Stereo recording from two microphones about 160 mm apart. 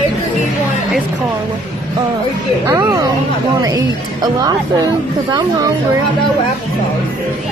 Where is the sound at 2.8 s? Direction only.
25° right (ahead or behind).